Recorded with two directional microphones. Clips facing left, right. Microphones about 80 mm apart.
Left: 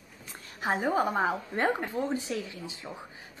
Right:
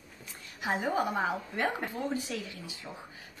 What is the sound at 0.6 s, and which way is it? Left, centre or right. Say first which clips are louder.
A woman's voice: left 3 dB; left.